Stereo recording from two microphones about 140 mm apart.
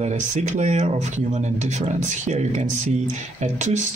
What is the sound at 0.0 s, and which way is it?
Speech, 55° right (ahead or behind).